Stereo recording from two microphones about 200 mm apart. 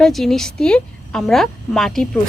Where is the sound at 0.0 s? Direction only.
Centre (ahead or behind).